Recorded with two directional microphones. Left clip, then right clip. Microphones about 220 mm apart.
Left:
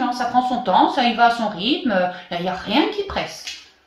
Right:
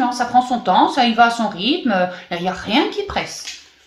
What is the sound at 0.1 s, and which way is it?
Speech, 40° right (ahead or behind).